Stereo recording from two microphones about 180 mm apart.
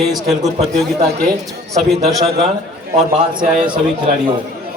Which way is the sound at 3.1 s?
25° right (ahead or behind).